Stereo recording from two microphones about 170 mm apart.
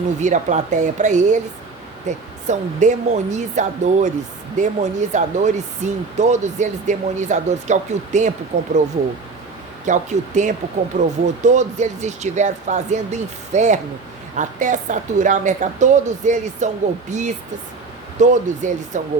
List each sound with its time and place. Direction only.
0.2 s speech: 45° right (ahead or behind)
9.8 s speech: 45° right (ahead or behind)